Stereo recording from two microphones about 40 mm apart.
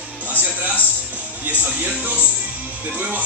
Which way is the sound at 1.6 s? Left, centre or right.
Right.